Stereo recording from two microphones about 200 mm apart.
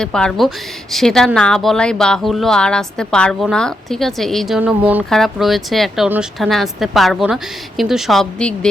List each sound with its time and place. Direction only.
0.0 s speech: 5° left (ahead or behind)